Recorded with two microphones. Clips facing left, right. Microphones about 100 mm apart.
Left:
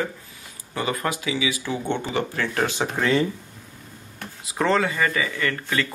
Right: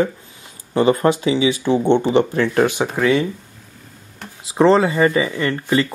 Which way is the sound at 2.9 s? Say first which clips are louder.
Right 3 dB; 5° right (ahead or behind).